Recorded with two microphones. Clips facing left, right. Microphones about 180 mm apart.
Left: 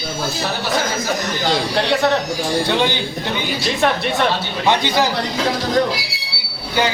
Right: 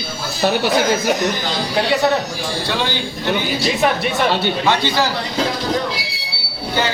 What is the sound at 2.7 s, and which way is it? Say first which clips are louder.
Speech: left 2 dB; 20° left (ahead or behind).